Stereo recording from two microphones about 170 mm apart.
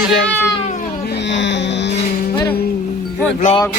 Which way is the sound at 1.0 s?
85° left.